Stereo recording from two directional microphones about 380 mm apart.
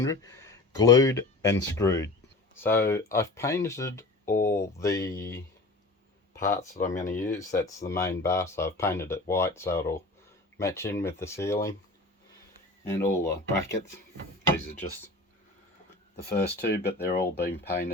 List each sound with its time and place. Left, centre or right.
0.0 s speech: centre
6.6 s speech: centre
7.3 s speech: centre
12.9 s speech: centre
16.1 s speech: left